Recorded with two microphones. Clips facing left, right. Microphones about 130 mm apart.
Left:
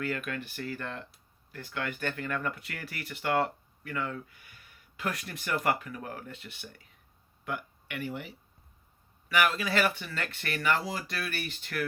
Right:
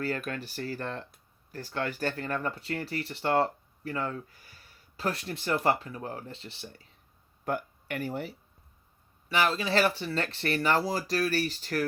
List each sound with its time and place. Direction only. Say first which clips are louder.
0.0 s speech: right 1 dB; 35° right (ahead or behind)
7.4 s speech: right 5 dB; 40° right (ahead or behind)
9.3 s speech: right 1 dB; 30° right (ahead or behind)